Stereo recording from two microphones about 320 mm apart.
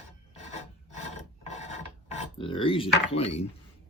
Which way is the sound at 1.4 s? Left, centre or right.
Left.